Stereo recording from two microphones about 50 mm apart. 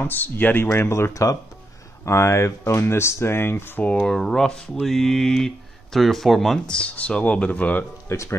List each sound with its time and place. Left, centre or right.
0.0 s speech: left
0.7 s speech: left
2.0 s speech: left
3.8 s speech: left
4.7 s music: centre
5.9 s speech: centre
6.7 s speech: centre
8.1 s speech: left